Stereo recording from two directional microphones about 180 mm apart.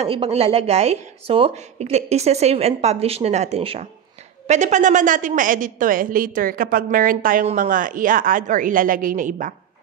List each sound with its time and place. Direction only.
0.0 s a woman's voice: 35° right (ahead or behind)